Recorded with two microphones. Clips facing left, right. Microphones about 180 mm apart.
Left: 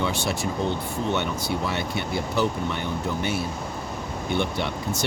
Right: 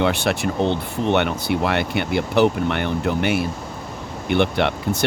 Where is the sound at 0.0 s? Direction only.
65° right (ahead or behind).